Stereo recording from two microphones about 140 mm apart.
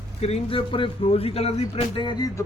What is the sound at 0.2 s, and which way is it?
Speech, 45° left (ahead or behind).